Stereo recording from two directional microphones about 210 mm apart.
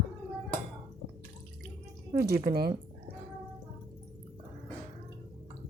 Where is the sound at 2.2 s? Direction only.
45° right (ahead or behind).